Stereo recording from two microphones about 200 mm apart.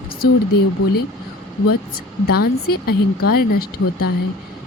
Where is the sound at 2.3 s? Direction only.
50° left (ahead or behind).